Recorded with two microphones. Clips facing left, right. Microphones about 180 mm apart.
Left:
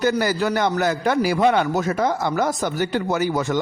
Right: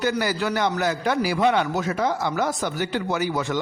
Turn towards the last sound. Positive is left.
turn(degrees=45)  # may be behind; listen again after turning